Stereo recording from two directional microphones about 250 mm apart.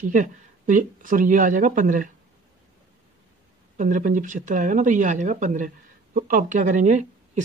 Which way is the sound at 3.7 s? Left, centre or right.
Right.